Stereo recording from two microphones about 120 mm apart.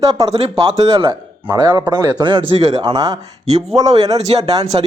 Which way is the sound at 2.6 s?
60° right (ahead or behind).